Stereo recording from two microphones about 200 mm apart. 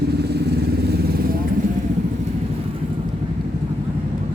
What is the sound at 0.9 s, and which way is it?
Vehicle, 50° right (ahead or behind).